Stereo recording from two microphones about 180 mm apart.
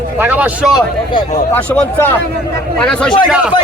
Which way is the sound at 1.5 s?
10° left (ahead or behind).